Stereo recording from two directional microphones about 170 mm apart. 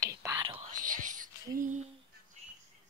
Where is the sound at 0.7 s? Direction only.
50° right (ahead or behind).